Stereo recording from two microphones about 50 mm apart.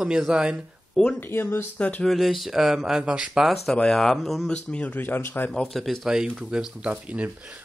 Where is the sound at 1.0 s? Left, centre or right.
Centre.